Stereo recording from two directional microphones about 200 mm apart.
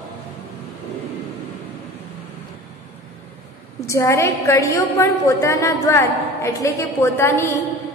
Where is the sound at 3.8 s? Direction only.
15° left (ahead or behind).